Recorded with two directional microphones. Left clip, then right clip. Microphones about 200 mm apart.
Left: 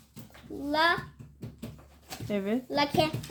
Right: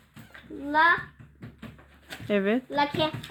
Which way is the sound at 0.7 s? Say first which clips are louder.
Right 4 dB; 20° left (ahead or behind).